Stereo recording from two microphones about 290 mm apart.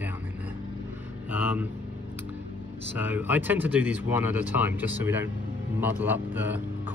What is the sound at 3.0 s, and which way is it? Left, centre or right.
Speech, centre.